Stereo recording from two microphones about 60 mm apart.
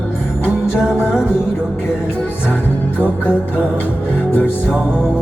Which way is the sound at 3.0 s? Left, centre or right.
Left.